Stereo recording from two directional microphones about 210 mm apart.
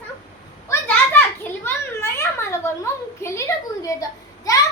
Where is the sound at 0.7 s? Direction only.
10° left (ahead or behind).